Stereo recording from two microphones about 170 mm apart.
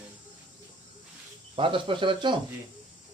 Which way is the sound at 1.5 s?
30° right (ahead or behind).